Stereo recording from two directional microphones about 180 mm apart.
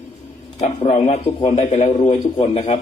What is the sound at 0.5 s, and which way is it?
A man's voice, 35° left (ahead or behind).